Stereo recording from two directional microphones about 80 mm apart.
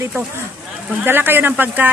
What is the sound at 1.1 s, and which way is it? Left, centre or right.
Speech, right.